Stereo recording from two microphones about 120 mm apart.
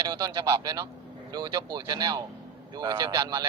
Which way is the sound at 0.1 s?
40° right (ahead or behind).